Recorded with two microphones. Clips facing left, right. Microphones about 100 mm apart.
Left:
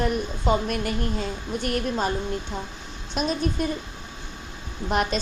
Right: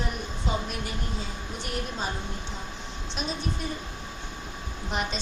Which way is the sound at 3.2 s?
55° left (ahead or behind).